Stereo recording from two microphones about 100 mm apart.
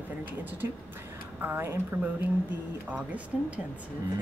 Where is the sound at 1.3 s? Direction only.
20° right (ahead or behind).